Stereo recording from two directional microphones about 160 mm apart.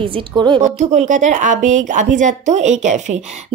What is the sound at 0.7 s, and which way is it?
A woman's voice, 45° right (ahead or behind).